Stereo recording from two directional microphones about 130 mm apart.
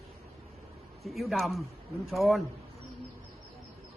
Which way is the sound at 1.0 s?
Centre (ahead or behind).